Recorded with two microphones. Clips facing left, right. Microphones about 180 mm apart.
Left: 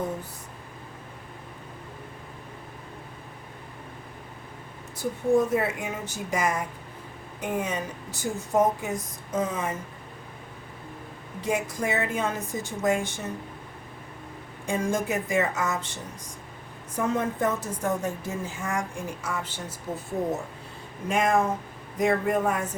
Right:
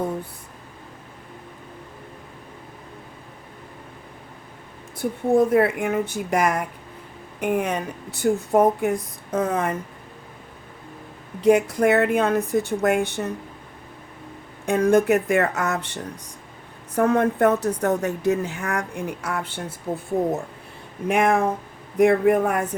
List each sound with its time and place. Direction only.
4.9 s a woman's voice: 60° right (ahead or behind)
11.4 s a woman's voice: 65° right (ahead or behind)
14.7 s a woman's voice: 65° right (ahead or behind)
21.1 s a woman's voice: 65° right (ahead or behind)